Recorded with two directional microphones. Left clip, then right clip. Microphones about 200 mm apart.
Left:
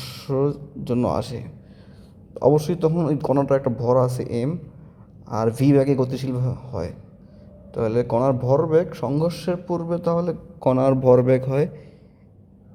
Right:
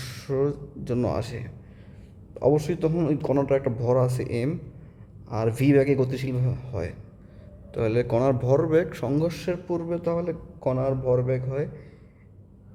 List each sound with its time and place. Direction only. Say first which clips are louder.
0.0 s a man's voice: left 3 dB; 10° left (ahead or behind)
10.7 s a man's voice: left 8 dB; 30° left (ahead or behind)